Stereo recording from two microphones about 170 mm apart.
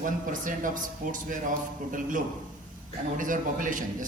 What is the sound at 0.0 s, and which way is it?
A man's voice, 50° right (ahead or behind).